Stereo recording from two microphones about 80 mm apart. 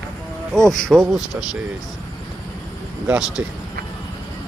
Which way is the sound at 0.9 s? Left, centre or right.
Centre.